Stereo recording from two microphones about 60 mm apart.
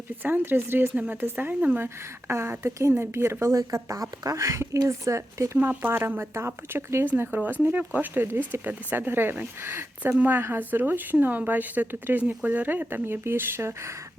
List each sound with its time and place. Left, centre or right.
0.2 s speech: right
3.4 s speech: right
3.8 s speech: right
5.5 s speech: right
7.0 s speech: right
8.2 s speech: right